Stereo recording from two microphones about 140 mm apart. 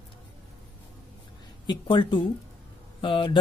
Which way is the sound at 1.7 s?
35° left (ahead or behind).